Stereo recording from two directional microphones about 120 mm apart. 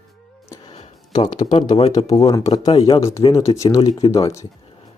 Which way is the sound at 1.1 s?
35° left (ahead or behind).